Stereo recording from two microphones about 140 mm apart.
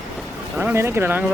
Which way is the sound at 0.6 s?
15° right (ahead or behind).